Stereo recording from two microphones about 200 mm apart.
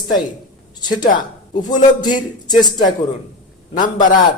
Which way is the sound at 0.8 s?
20° left (ahead or behind).